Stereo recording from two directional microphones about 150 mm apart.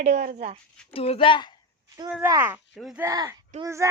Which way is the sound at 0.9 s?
40° left (ahead or behind).